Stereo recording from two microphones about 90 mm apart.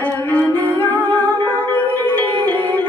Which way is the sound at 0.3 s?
20° left (ahead or behind).